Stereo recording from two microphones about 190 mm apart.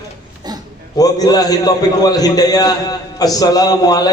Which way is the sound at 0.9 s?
20° left (ahead or behind).